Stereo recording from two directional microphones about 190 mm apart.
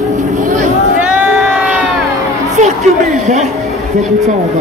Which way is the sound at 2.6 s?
40° right (ahead or behind).